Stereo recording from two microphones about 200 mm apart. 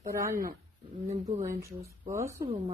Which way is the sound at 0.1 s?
15° right (ahead or behind).